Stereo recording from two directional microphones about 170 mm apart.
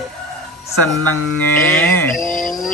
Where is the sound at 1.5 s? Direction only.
10° left (ahead or behind).